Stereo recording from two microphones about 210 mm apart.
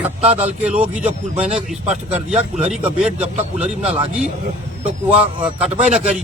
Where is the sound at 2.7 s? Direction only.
5° right (ahead or behind).